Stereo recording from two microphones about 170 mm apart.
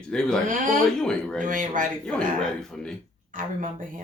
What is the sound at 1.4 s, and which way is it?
Speech, 50° right (ahead or behind).